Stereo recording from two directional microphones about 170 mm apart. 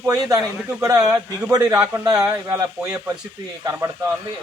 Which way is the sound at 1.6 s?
5° right (ahead or behind).